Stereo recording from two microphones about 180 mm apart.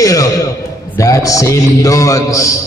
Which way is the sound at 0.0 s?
20° left (ahead or behind).